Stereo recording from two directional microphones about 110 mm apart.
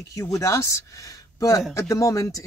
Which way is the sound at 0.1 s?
30° left (ahead or behind).